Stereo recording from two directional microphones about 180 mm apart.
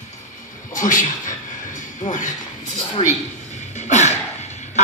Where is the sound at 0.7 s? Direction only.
45° left (ahead or behind).